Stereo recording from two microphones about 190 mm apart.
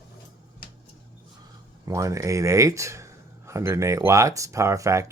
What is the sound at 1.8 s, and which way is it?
Speech, 15° right (ahead or behind).